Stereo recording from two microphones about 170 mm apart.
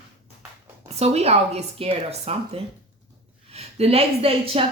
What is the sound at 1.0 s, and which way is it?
A woman's voice, 40° right (ahead or behind).